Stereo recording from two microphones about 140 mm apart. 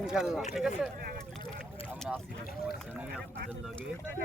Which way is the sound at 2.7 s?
5° right (ahead or behind).